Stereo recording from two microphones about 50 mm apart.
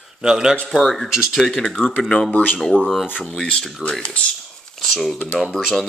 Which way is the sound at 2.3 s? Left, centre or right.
Left.